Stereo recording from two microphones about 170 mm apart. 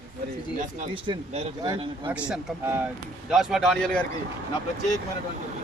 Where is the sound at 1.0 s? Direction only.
40° right (ahead or behind).